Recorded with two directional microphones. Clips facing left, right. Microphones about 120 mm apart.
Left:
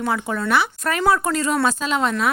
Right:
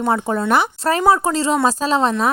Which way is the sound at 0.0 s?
35° right (ahead or behind).